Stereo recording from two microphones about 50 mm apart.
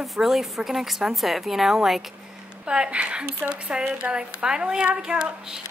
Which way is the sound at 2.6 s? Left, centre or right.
Centre.